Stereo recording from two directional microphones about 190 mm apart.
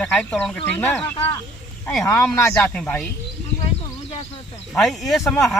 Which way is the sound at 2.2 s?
5° left (ahead or behind).